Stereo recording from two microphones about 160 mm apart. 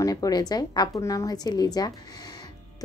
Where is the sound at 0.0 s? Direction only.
20° left (ahead or behind).